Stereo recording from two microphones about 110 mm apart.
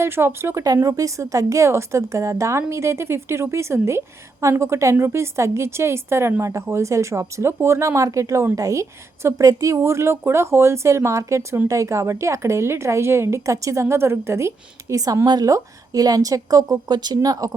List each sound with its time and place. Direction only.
0.0 s speech: 25° right (ahead or behind)